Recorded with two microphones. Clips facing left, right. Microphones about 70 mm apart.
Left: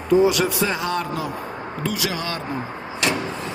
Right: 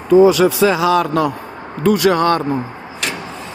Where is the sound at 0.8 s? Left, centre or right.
Right.